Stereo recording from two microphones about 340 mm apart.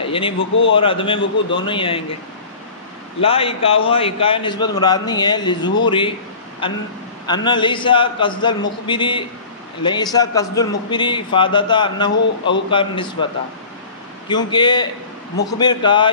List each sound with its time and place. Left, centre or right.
0.0 s a sound: centre
0.7 s speech: centre
3.2 s speech: centre